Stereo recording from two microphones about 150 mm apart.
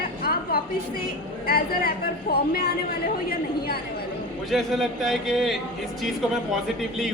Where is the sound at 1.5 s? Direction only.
85° left.